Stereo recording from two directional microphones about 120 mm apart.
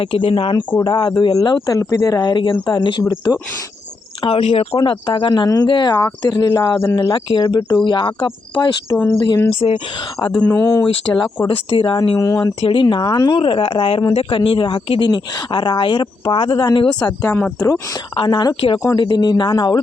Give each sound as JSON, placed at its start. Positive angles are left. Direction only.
{"t": 0.0, "sound": "speech", "side_deg": 45}
{"t": 0.8, "sound": "speech", "side_deg": 35}
{"t": 1.8, "sound": "speech", "side_deg": 25}
{"t": 2.2, "sound": "speech", "side_deg": 40}
{"t": 4.2, "sound": "speech", "side_deg": 55}
{"t": 4.8, "sound": "speech", "side_deg": 45}
{"t": 9.6, "sound": "speech", "side_deg": 45}
{"t": 10.4, "sound": "speech", "side_deg": 20}
{"t": 10.8, "sound": "speech", "side_deg": 50}
{"t": 12.5, "sound": "speech", "side_deg": 45}
{"t": 18.1, "sound": "speech", "side_deg": 40}